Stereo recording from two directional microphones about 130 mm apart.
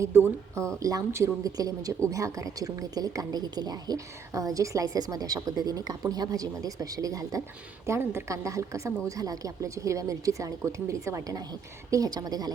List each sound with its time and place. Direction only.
0.0 s speech: 20° right (ahead or behind)